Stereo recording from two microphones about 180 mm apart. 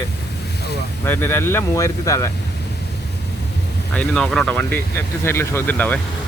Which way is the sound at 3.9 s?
5° left (ahead or behind).